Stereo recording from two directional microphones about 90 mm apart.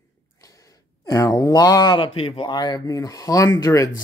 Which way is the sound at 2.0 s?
85° left.